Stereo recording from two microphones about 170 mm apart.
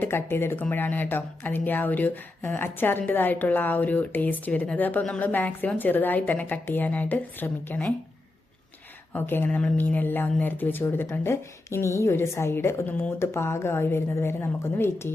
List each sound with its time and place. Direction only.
0.0 s speech: 15° left (ahead or behind)
9.1 s speech: 10° left (ahead or behind)